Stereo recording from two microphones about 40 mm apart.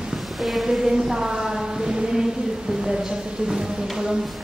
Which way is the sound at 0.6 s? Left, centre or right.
Centre.